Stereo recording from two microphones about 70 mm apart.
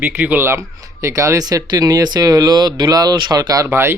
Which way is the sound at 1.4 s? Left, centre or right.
Right.